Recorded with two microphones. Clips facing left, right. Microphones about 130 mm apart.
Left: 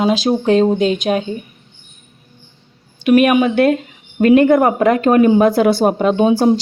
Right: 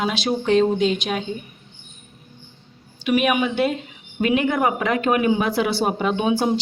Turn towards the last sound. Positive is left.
turn(degrees=40)  # may be behind; listen again after turning